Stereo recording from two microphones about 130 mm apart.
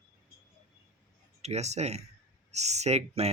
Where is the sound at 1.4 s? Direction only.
60° right (ahead or behind).